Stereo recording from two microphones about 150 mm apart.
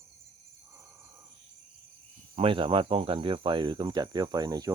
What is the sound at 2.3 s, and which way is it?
Cricket, 40° right (ahead or behind).